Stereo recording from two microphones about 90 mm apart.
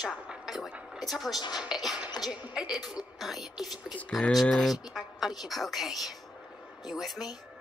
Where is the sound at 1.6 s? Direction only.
5° right (ahead or behind).